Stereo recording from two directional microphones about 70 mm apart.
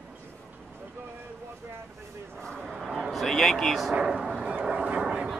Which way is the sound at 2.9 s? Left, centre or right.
Centre.